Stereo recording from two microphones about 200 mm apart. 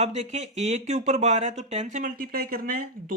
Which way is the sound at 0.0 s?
30° right (ahead or behind).